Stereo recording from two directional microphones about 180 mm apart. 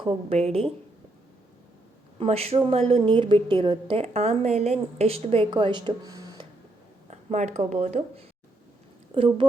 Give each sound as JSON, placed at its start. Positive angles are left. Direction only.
{"t": 0.0, "sound": "a woman's voice", "side_deg": -30}
{"t": 2.1, "sound": "a woman's voice", "side_deg": -35}
{"t": 7.1, "sound": "speech", "side_deg": -40}